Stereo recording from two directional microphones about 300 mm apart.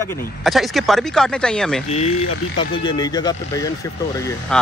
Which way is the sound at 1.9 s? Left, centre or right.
Left.